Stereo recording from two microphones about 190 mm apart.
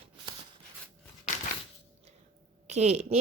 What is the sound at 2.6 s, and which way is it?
Speech, 35° right (ahead or behind).